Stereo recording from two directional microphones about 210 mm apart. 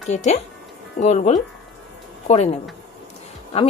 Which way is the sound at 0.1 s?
35° left (ahead or behind).